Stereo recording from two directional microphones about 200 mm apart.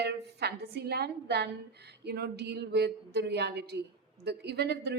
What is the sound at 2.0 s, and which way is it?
A woman's voice, 55° right (ahead or behind).